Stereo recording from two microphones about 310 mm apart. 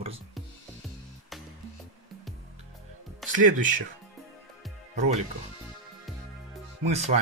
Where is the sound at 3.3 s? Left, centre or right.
Right.